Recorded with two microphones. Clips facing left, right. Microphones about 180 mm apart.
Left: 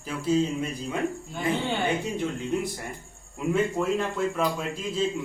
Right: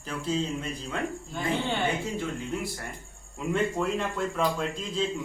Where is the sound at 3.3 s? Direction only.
5° left (ahead or behind).